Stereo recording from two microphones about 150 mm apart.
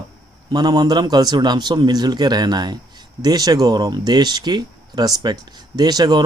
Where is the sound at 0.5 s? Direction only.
25° right (ahead or behind).